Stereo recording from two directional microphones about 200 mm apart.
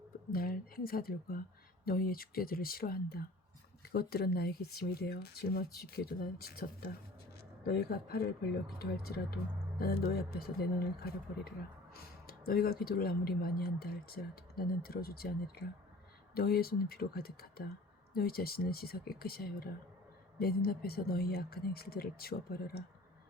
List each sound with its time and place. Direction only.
0.3 s speech: 45° left (ahead or behind)